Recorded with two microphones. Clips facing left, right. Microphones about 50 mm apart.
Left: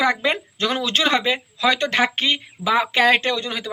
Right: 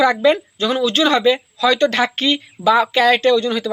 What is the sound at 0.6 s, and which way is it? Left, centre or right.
Speech, left.